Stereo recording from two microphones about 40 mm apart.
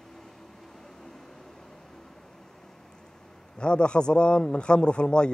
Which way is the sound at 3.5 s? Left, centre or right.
Left.